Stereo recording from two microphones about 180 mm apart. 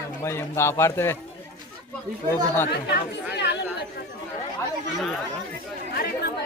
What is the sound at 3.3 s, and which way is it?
Chatter, 75° left (ahead or behind).